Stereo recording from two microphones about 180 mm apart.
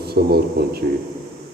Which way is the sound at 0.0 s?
60° right (ahead or behind).